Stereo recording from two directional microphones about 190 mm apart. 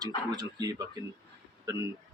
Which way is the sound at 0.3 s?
20° right (ahead or behind).